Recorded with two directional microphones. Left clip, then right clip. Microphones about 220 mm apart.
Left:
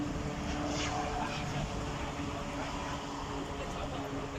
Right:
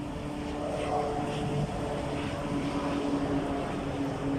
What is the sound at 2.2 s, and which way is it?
Vehicle, 50° right (ahead or behind).